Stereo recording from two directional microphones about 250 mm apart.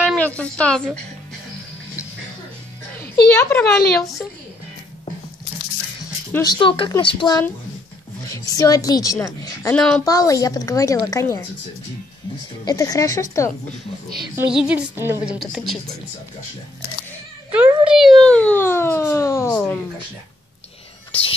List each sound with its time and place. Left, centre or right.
0.0 s a sound: centre
0.4 s a woman's voice: centre
3.3 s a woman's voice: centre
6.3 s a woman's voice: centre
10.0 s a woman's voice: centre
12.6 s a woman's voice: centre
14.3 s a woman's voice: centre
17.5 s a sound: centre
21.1 s a sound: left